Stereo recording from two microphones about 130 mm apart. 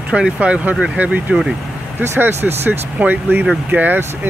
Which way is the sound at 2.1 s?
15° right (ahead or behind).